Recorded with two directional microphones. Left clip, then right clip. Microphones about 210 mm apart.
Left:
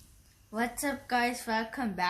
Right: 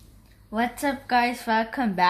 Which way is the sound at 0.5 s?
35° right (ahead or behind).